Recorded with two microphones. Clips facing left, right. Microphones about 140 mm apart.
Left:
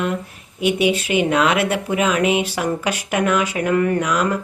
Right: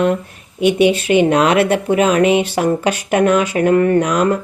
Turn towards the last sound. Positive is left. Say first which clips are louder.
# right 5 dB
turn(degrees=-35)  # may be behind; listen again after turning